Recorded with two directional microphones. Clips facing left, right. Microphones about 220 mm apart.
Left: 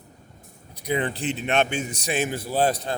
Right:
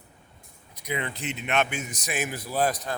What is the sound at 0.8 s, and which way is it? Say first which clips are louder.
A man's voice: left 6 dB; 35° left (ahead or behind).